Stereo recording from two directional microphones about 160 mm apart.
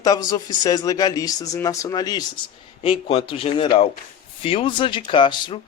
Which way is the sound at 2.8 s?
35° left (ahead or behind).